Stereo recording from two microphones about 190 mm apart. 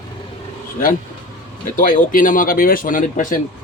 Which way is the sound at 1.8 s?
45° left (ahead or behind).